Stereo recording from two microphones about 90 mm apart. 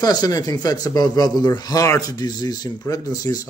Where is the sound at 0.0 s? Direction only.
45° left (ahead or behind).